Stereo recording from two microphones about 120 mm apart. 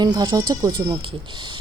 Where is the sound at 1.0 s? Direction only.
40° right (ahead or behind).